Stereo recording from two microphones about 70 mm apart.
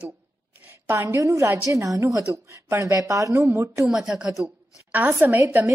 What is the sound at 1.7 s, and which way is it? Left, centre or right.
A woman's voice, right.